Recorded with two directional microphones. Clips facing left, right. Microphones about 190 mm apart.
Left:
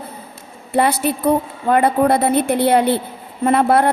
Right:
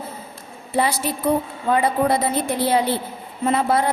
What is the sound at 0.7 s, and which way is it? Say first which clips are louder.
A woman's voice: left 5 dB; 60° left (ahead or behind).